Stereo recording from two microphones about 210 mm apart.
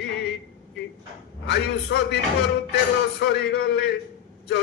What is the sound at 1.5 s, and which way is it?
Speech, 50° left (ahead or behind).